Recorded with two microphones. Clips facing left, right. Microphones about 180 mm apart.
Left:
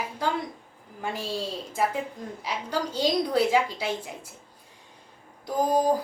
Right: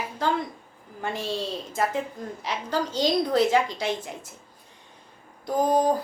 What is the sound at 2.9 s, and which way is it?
Speech, 10° left (ahead or behind).